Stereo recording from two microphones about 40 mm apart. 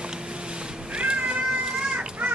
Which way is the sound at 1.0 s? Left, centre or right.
Right.